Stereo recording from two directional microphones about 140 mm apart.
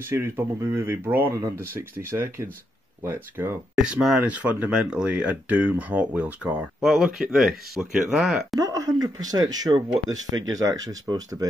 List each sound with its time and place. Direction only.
0.0 s speech: 15° right (ahead or behind)
3.7 s speech: 5° right (ahead or behind)
8.5 s speech: 25° right (ahead or behind)